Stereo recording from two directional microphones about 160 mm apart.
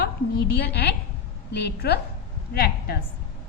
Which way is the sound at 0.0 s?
85° left.